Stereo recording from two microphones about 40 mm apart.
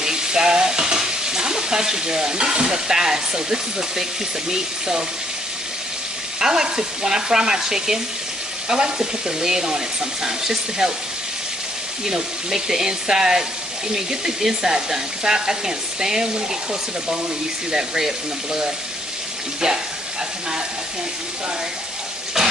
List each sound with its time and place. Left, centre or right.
0.0 s stir: centre
4.5 s speech: centre
6.4 s speech: centre
12.0 s speech: centre
17.6 s speech: centre
22.4 s water: centre